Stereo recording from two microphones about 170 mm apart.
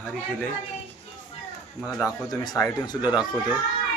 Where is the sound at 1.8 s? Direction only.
20° left (ahead or behind).